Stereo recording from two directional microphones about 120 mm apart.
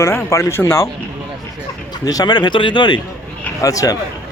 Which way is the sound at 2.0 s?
35° left (ahead or behind).